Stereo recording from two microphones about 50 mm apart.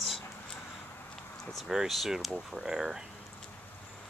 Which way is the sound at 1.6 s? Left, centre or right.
Centre.